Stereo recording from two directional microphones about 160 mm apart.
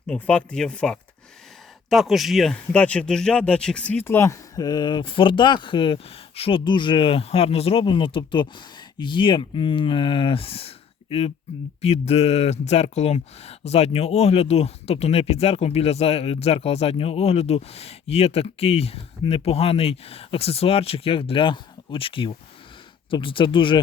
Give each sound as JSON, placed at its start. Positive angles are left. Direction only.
{"t": 0.1, "sound": "speech", "side_deg": 5}